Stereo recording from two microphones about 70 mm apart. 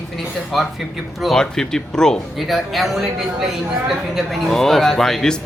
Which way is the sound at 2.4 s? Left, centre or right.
Centre.